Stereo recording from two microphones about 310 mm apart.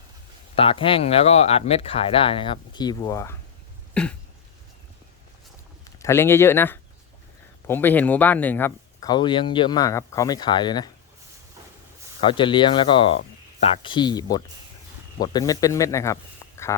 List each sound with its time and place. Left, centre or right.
0.5 s speech: centre
4.0 s throat clearing: centre
5.8 s speech: centre
12.2 s speech: centre